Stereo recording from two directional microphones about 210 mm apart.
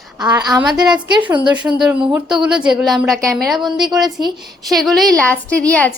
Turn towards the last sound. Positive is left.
turn(degrees=5)  # may be behind; listen again after turning